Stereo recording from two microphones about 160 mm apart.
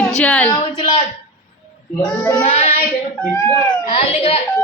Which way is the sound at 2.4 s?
40° left (ahead or behind).